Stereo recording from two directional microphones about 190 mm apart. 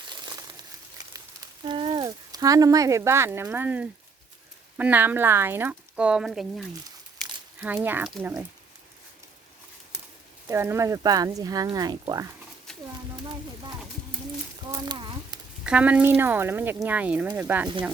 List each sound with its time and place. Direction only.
0.1 s crumpling: 20° right (ahead or behind)
1.6 s speech: 25° right (ahead or behind); by 8.4 s 10° right (ahead or behind)
10.4 s speech: 10° right (ahead or behind)
14.6 s speech: 20° right (ahead or behind)
15.6 s speech: 5° right (ahead or behind)